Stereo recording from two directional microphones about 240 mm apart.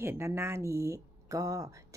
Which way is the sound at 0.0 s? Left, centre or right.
Centre.